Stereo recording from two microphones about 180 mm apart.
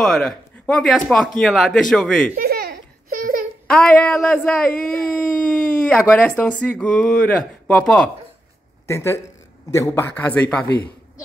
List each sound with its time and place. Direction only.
0.0 s speech: 5° left (ahead or behind)
2.3 s a sound: 60° right (ahead or behind)
3.6 s speech: 5° left (ahead or behind)
8.8 s speech: 15° left (ahead or behind)